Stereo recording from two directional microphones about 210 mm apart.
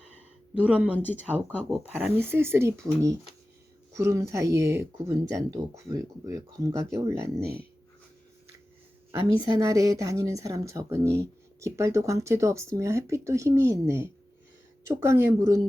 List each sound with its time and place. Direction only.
0.5 s speech: 5° right (ahead or behind)
7.4 s speech: 50° right (ahead or behind)
9.4 s speech: 15° right (ahead or behind)